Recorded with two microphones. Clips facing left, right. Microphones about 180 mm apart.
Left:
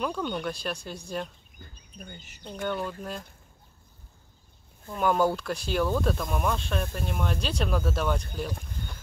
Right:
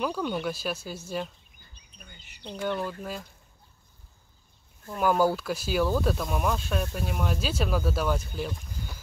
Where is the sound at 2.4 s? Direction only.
Centre (ahead or behind).